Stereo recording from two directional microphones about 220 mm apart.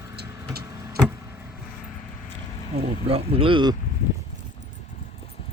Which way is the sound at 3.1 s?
25° right (ahead or behind).